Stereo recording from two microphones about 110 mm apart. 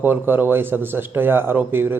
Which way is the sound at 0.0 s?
15° right (ahead or behind).